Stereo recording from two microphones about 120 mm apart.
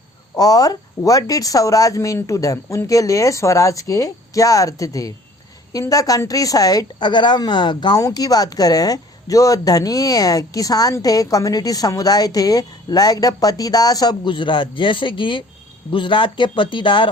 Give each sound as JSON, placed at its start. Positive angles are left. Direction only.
{"t": 0.3, "sound": "a woman's voice", "side_deg": 30}